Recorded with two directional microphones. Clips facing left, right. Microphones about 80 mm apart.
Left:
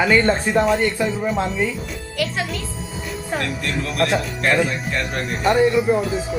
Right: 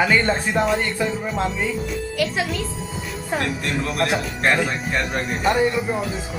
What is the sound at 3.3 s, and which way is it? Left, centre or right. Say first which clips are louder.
Speech: right 1 dB; right.